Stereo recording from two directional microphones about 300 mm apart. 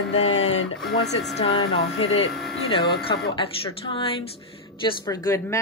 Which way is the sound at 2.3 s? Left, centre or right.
Centre.